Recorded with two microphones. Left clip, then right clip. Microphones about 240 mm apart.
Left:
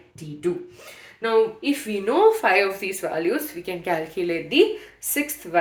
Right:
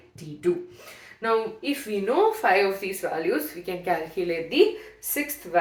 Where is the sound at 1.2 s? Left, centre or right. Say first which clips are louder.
Left 5 dB; left.